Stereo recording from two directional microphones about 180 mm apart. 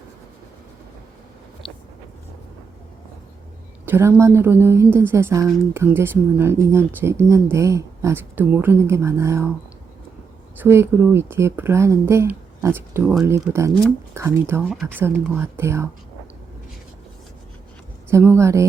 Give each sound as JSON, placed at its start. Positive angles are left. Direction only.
{"t": 1.6, "sound": "a sound", "side_deg": 5}
{"t": 3.8, "sound": "a woman's voice", "side_deg": -10}
{"t": 10.6, "sound": "a woman's voice", "side_deg": -15}
{"t": 14.6, "sound": "a woman's voice", "side_deg": 0}
{"t": 18.1, "sound": "a woman's voice", "side_deg": -15}